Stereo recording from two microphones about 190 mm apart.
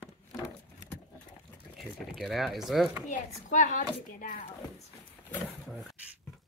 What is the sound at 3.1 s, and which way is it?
A woman's voice, 40° left (ahead or behind).